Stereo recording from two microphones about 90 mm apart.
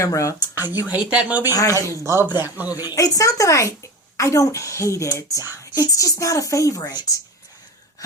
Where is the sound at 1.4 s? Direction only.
40° left (ahead or behind).